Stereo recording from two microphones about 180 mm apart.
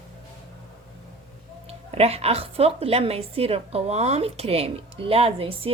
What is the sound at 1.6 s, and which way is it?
A woman's voice, 35° right (ahead or behind).